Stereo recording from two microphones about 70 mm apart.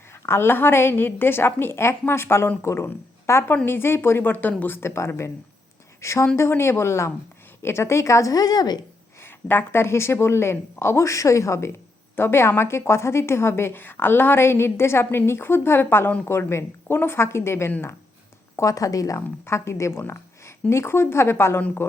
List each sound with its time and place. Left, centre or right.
0.3 s a woman's voice: left
9.2 s a woman's voice: left
18.5 s a woman's voice: left
19.5 s a woman's voice: left